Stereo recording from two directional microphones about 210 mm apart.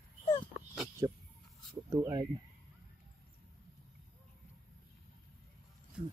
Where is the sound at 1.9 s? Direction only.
20° right (ahead or behind).